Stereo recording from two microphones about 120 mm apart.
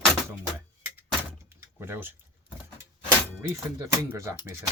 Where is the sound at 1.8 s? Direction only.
20° right (ahead or behind).